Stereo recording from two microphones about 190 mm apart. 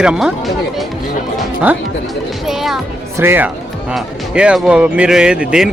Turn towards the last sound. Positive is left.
turn(degrees=-5)  # may be behind; listen again after turning